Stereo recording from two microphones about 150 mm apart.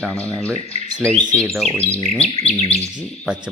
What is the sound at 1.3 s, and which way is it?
Speech, 5° left (ahead or behind).